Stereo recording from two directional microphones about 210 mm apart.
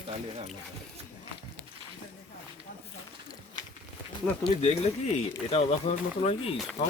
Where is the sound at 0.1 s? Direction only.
30° right (ahead or behind).